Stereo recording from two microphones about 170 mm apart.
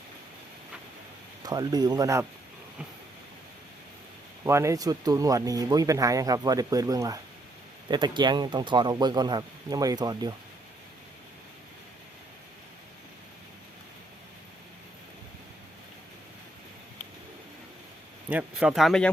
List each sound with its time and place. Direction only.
1.4 s speech: 25° right (ahead or behind)
4.4 s speech: 15° right (ahead or behind)
18.3 s speech: 10° right (ahead or behind)